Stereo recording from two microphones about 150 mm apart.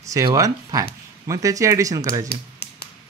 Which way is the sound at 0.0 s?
20° right (ahead or behind).